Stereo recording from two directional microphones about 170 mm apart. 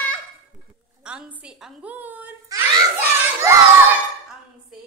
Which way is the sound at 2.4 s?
20° right (ahead or behind).